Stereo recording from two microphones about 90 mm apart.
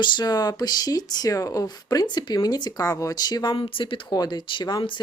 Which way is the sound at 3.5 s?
80° left.